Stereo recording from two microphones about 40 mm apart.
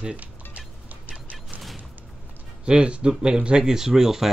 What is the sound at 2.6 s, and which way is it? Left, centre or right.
Speech, right.